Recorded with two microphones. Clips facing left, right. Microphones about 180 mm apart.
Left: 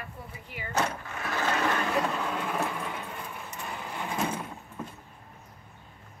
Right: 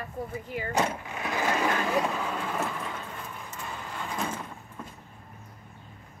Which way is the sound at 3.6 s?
15° left (ahead or behind).